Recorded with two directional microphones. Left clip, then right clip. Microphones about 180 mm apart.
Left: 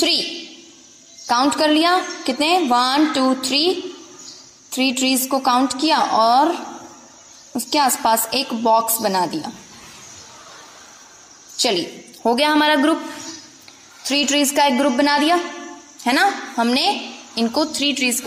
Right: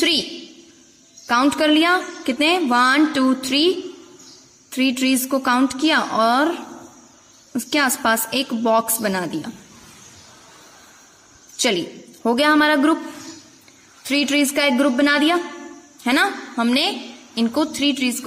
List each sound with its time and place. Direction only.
1.2 s a woman's voice: 45° right (ahead or behind)
12.2 s a woman's voice: 40° right (ahead or behind)
14.0 s a woman's voice: 45° right (ahead or behind)